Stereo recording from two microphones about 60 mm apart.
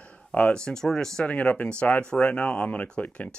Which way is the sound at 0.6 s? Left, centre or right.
Centre.